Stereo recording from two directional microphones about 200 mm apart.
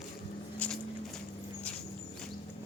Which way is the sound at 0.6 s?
5° left (ahead or behind).